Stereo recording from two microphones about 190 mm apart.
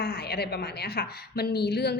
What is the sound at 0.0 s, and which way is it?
A woman's voice, 55° left (ahead or behind).